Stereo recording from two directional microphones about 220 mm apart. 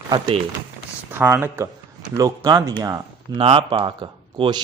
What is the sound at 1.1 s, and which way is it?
Speech, 10° right (ahead or behind).